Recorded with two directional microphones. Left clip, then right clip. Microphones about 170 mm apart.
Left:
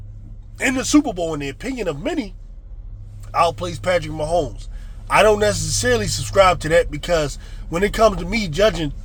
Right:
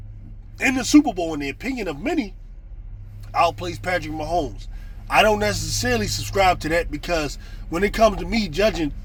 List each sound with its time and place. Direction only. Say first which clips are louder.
0.5 s speech: even; 25° left (ahead or behind)
3.3 s speech: left 2 dB; 30° left (ahead or behind)